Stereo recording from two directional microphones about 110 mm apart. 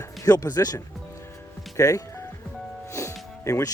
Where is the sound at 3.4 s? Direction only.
30° left (ahead or behind).